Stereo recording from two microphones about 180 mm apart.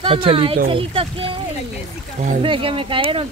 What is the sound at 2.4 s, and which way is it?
Speech, 30° right (ahead or behind).